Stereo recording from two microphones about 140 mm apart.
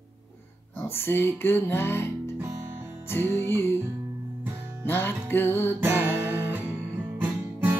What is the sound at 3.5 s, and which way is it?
Music, 15° left (ahead or behind).